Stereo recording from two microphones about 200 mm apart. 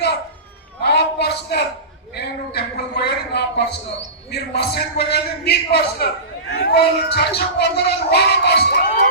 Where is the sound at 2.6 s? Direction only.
55° left (ahead or behind).